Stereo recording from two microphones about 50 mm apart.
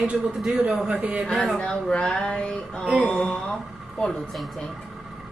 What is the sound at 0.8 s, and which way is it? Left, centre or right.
Speech, right.